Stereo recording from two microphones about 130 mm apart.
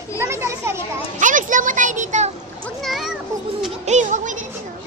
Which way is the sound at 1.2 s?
85° right.